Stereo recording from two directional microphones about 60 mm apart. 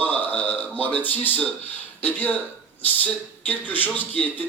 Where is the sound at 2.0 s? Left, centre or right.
Left.